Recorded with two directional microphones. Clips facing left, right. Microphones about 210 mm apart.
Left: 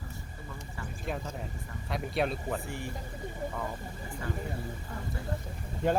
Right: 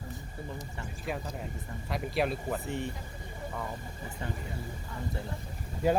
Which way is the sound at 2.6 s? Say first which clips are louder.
Right 4 dB; 20° right (ahead or behind).